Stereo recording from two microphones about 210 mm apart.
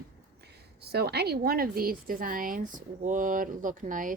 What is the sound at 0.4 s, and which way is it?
A woman's voice, 50° right (ahead or behind).